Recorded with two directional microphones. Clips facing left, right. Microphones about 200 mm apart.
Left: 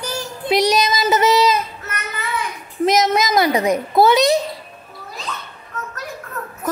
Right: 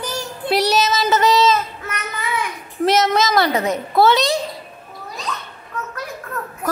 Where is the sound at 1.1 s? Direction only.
20° left (ahead or behind).